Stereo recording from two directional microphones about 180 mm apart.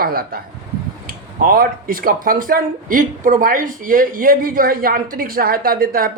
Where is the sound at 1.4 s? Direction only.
55° right (ahead or behind).